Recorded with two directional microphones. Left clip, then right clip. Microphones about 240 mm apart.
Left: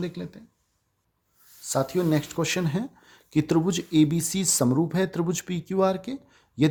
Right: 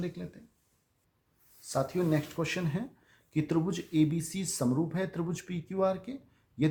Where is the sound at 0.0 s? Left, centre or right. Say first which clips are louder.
Left 6 dB; left.